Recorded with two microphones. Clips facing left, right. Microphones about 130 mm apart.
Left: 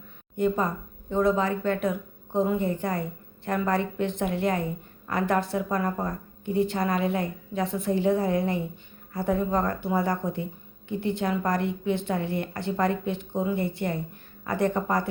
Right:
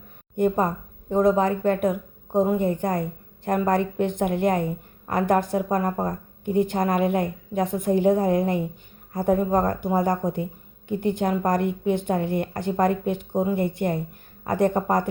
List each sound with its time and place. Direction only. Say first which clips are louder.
0.3 s a woman's voice: right 3 dB; 50° right (ahead or behind)